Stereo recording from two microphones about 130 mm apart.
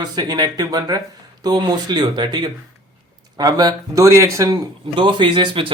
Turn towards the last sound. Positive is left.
turn(degrees=-40)  # may be behind; listen again after turning